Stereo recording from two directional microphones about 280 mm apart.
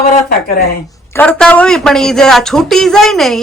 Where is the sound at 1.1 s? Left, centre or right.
Centre.